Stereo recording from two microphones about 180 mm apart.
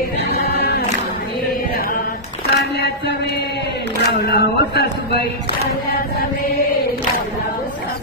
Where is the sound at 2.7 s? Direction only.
65° left (ahead or behind).